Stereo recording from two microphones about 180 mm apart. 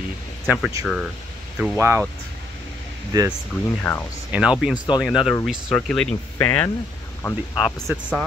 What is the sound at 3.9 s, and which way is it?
Speech, 15° left (ahead or behind).